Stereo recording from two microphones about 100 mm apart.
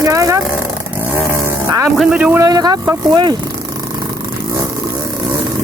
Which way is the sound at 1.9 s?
5° right (ahead or behind).